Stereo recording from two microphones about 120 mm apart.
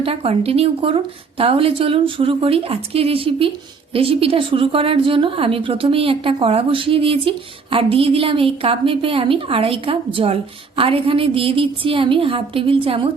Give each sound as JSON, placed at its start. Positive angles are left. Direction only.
{"t": 0.0, "sound": "a woman's voice", "side_deg": -55}